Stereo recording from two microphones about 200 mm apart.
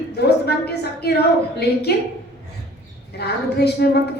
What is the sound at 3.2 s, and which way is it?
Speech, 55° left (ahead or behind).